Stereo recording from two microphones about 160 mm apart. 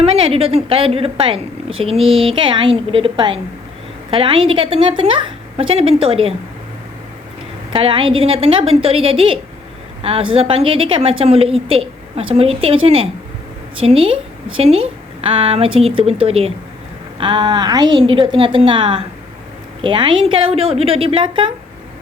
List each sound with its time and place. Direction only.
0.0 s a woman's voice: 35° right (ahead or behind)
7.7 s a woman's voice: 35° right (ahead or behind)